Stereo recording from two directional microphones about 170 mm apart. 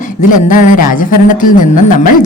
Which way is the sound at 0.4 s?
50° left (ahead or behind).